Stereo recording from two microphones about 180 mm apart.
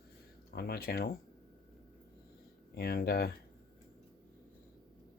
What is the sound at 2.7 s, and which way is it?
Speech, 60° left (ahead or behind).